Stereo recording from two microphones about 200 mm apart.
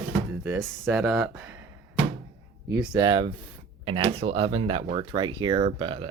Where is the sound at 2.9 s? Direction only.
20° right (ahead or behind).